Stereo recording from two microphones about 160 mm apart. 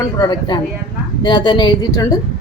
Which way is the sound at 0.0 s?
25° left (ahead or behind).